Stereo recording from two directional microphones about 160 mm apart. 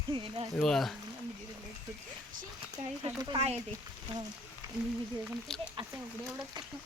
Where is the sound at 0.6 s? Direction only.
Centre (ahead or behind).